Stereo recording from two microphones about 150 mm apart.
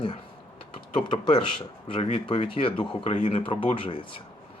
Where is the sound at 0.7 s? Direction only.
30° left (ahead or behind).